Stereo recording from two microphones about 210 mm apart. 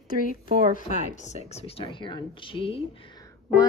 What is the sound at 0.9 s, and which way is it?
A woman's voice, 30° left (ahead or behind).